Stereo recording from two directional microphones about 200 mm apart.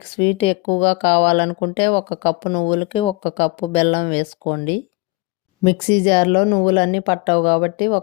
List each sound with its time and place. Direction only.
0.0 s speech: 30° left (ahead or behind)